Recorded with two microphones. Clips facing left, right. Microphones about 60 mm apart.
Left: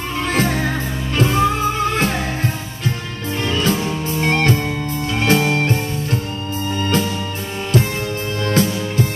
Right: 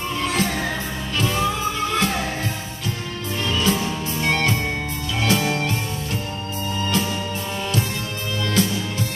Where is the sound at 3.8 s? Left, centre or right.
Left.